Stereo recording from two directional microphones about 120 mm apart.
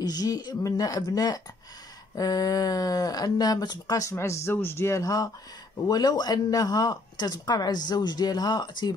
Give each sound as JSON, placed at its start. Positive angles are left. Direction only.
{"t": 0.0, "sound": "speech", "side_deg": 30}